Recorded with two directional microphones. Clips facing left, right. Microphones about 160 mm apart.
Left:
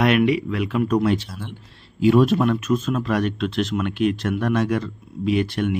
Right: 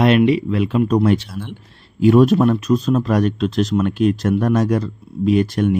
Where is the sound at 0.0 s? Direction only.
30° right (ahead or behind).